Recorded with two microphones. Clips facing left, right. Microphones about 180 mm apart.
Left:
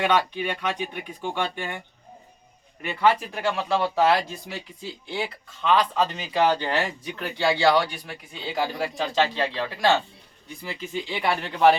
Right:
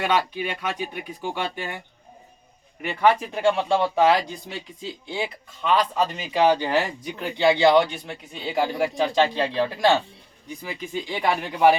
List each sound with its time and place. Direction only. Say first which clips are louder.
0.0 s speech: left 1 dB; 10° right (ahead or behind)
2.8 s speech: right 2 dB; 15° right (ahead or behind)
3.4 s speech: right 4 dB; 25° right (ahead or behind)